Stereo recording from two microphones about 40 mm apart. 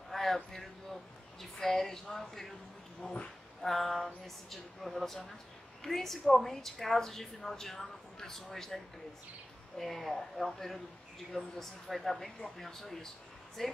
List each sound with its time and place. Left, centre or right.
0.1 s a woman's voice: centre
3.0 s speech: left
3.6 s a woman's voice: centre